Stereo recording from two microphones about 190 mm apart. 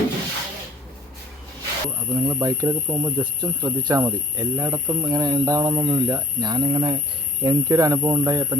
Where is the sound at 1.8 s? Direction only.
15° right (ahead or behind).